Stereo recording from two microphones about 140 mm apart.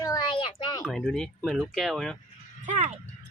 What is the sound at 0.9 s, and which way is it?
Speech, centre (ahead or behind).